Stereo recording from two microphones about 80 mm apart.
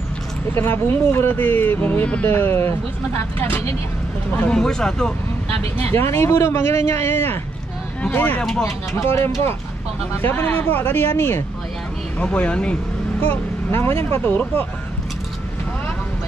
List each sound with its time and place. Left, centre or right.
0.6 s speech: left
2.3 s speech: left
4.5 s speech: centre
5.8 s speech: left
8.9 s speech: left
10.2 s speech: left
12.2 s speech: centre
13.7 s speech: left
14.2 s speech: left